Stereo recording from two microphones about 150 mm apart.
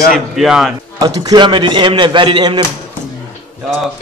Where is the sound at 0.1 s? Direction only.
Centre (ahead or behind).